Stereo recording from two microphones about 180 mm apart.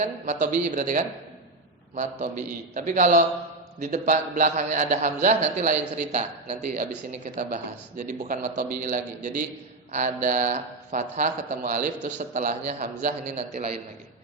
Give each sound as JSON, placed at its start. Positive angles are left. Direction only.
{"t": 0.0, "sound": "a man's voice", "side_deg": -45}
{"t": 2.2, "sound": "a man's voice", "side_deg": -45}